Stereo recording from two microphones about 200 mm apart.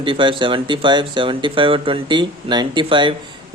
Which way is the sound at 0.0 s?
25° right (ahead or behind).